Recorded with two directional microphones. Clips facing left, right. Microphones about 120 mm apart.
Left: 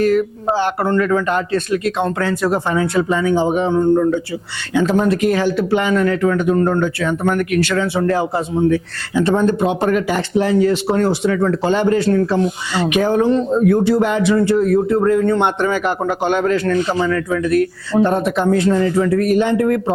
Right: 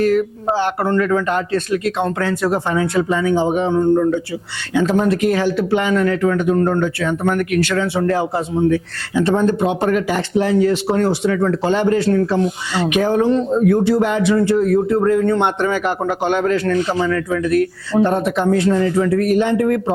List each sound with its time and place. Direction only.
0.0 s speech: 20° left (ahead or behind)